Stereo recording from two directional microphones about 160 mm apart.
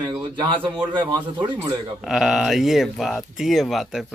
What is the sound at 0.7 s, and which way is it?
Speech, 30° right (ahead or behind).